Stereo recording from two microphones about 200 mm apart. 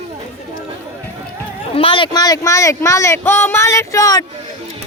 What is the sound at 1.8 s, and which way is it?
Speech, 25° left (ahead or behind).